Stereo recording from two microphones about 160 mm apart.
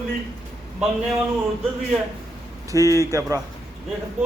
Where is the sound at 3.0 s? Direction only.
20° right (ahead or behind).